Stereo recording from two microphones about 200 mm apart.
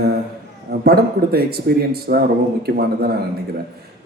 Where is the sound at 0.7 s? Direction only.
50° right (ahead or behind).